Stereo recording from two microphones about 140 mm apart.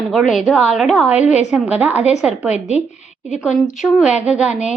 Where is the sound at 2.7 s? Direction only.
55° left (ahead or behind).